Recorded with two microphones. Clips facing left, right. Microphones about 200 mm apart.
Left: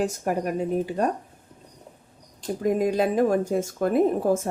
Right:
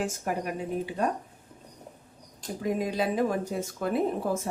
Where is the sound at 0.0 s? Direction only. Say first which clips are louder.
Left 5 dB; 40° left (ahead or behind).